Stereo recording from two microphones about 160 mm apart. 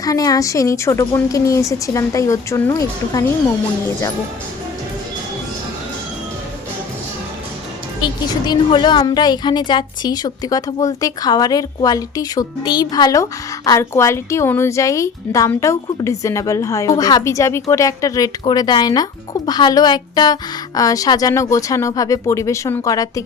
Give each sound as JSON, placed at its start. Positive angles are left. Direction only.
{"t": 0.0, "sound": "a woman's voice", "side_deg": 20}
{"t": 8.0, "sound": "a woman's voice", "side_deg": 30}